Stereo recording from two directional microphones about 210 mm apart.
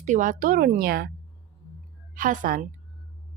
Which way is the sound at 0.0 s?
35° right (ahead or behind).